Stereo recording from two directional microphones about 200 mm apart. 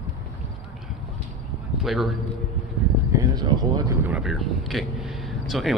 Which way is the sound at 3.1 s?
20° right (ahead or behind).